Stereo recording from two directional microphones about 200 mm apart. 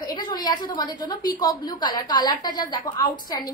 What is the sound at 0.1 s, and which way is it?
A woman's voice, 20° left (ahead or behind).